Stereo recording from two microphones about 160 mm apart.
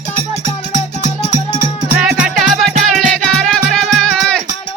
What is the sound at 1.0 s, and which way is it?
Music, 40° right (ahead or behind).